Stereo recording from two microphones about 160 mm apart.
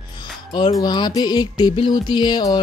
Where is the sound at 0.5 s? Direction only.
25° left (ahead or behind).